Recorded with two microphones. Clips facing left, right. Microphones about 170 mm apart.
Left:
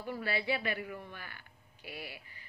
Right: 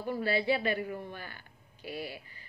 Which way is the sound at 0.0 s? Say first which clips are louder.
Right 5 dB; 30° right (ahead or behind).